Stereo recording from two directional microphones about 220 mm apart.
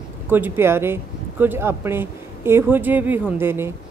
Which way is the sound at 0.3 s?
10° right (ahead or behind).